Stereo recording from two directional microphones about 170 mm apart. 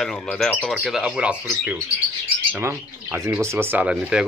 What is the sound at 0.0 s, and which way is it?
Speech, 5° left (ahead or behind).